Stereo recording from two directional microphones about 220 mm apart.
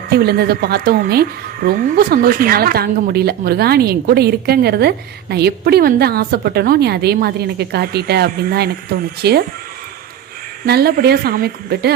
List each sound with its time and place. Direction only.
0.1 s a woman's voice: 45° right (ahead or behind)
10.7 s a woman's voice: 45° right (ahead or behind)